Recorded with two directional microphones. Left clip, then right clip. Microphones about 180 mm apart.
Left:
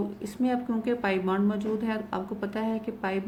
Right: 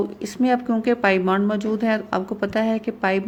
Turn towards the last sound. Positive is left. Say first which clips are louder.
# right 9 dB
turn(degrees=-45)  # may be behind; listen again after turning